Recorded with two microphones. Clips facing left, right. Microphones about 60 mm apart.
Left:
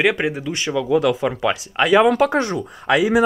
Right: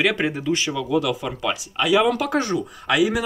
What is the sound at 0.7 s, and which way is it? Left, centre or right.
Speech, left.